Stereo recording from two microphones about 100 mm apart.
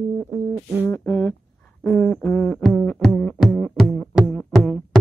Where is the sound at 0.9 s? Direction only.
25° left (ahead or behind).